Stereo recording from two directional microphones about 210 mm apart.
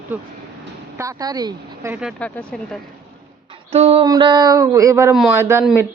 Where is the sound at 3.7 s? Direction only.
30° right (ahead or behind); by 5.6 s 10° right (ahead or behind).